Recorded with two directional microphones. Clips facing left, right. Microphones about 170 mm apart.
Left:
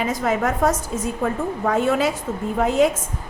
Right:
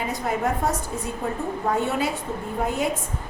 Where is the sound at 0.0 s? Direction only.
90° left.